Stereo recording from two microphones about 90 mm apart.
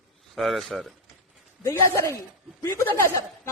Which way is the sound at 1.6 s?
35° left (ahead or behind).